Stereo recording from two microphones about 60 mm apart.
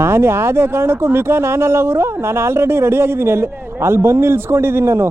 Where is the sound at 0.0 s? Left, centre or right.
Right.